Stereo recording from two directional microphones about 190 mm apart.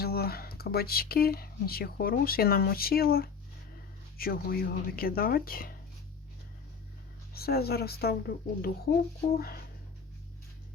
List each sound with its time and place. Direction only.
0.0 s speech: 55° left (ahead or behind)
7.3 s speech: 55° left (ahead or behind)